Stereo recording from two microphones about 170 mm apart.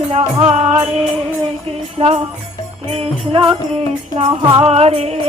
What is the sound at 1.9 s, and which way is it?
Music, 35° right (ahead or behind).